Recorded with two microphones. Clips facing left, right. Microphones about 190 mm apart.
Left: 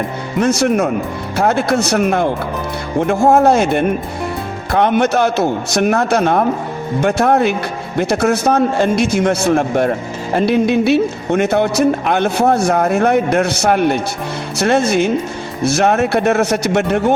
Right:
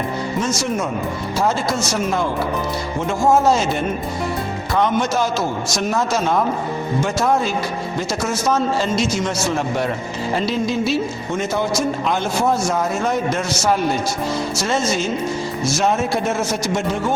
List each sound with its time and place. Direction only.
0.3 s speech: 60° left (ahead or behind)